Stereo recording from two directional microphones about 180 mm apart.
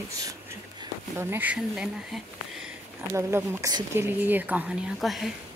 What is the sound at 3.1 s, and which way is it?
Speech, 15° right (ahead or behind).